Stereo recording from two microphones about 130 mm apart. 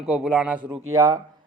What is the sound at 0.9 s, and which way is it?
Speech, 25° right (ahead or behind).